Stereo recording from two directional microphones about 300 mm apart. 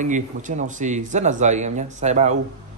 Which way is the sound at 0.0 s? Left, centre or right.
Right.